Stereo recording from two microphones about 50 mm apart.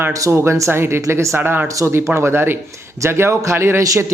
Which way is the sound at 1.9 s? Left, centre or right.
Right.